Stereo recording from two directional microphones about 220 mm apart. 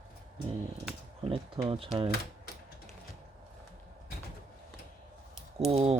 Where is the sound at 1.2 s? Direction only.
25° right (ahead or behind).